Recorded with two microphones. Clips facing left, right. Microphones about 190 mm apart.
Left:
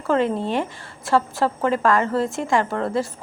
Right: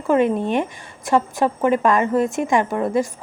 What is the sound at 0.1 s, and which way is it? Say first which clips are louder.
A woman's voice: right 3 dB; 15° right (ahead or behind).